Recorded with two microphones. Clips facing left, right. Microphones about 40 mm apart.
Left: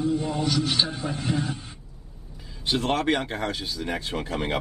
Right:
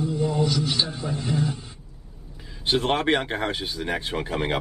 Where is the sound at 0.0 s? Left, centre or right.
Left.